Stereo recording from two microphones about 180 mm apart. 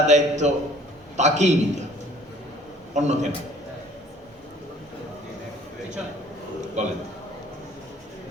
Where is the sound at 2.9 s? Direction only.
40° right (ahead or behind).